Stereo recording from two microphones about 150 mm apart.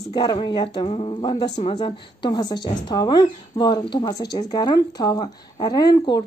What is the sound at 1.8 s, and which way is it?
Speech, 30° left (ahead or behind).